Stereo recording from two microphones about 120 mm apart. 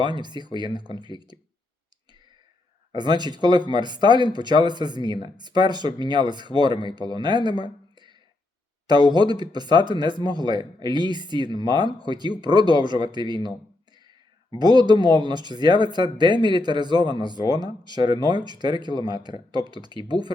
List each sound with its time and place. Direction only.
0.0 s speech: 40° right (ahead or behind)
2.9 s speech: 35° right (ahead or behind)
7.6 s a sound: 40° right (ahead or behind)
8.9 s speech: 35° right (ahead or behind)
14.6 s speech: 35° right (ahead or behind)
17.2 s speech: 40° left (ahead or behind)
18.3 s speech: 40° right (ahead or behind)